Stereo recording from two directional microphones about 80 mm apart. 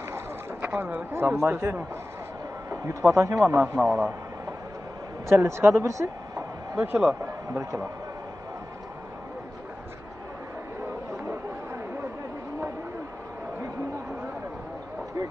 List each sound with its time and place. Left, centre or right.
0.1 s a sound: right
1.3 s a man's voice: right
5.3 s speech: right
6.7 s speech: right